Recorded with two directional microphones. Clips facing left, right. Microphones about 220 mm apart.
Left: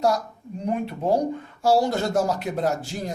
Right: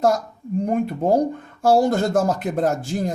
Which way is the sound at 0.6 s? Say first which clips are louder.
Right 4 dB; 50° right (ahead or behind).